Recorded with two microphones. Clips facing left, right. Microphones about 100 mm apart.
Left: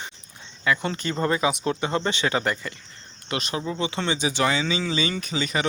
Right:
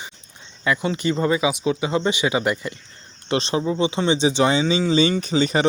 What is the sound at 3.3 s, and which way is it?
Speech, 30° right (ahead or behind).